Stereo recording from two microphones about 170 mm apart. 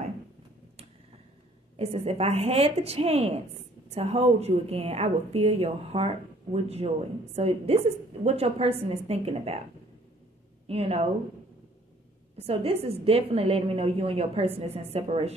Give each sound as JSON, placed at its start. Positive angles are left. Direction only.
{"t": 1.8, "sound": "a woman's voice", "side_deg": -35}
{"t": 10.7, "sound": "a woman's voice", "side_deg": -35}
{"t": 12.4, "sound": "a woman's voice", "side_deg": -35}